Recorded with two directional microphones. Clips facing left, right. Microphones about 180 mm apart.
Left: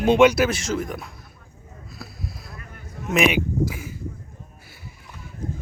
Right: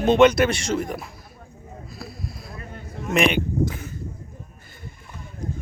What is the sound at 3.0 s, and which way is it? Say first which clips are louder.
Speech: even; 5° left (ahead or behind).